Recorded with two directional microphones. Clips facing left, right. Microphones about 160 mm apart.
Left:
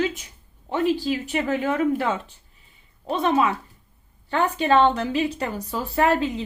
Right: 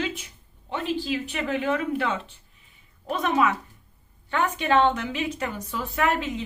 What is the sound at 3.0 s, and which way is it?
A woman's voice, 30° left (ahead or behind).